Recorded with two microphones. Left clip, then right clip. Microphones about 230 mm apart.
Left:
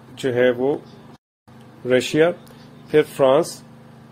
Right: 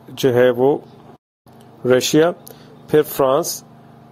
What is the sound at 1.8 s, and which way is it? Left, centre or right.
A man's voice, right.